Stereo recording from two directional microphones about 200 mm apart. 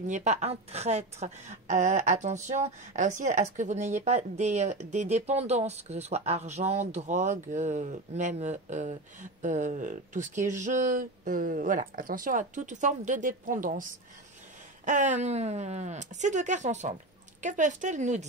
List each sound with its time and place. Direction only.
0.0 s a woman's voice: 35° right (ahead or behind)